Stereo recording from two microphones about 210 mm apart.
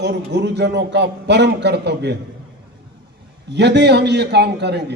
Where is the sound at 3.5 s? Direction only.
55° right (ahead or behind).